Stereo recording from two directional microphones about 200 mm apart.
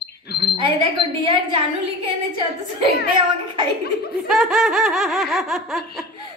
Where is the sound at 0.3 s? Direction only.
55° left (ahead or behind).